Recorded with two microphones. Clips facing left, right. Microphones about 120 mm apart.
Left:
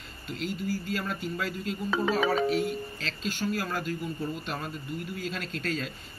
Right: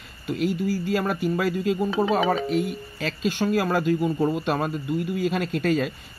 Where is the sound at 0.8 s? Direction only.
60° right (ahead or behind).